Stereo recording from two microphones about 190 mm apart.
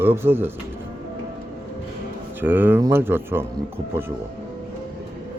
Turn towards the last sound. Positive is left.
turn(degrees=-10)  # may be behind; listen again after turning